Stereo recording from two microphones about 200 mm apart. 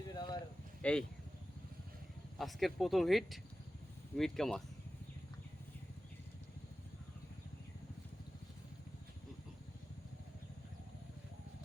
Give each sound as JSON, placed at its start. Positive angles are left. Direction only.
{"t": 0.1, "sound": "a sound", "side_deg": 20}
{"t": 0.8, "sound": "speech", "side_deg": 5}
{"t": 2.4, "sound": "speech", "side_deg": 0}